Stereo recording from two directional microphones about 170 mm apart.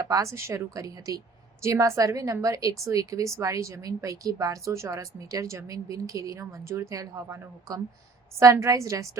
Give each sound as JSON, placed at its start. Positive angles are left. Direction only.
{"t": 0.0, "sound": "a woman's voice", "side_deg": -20}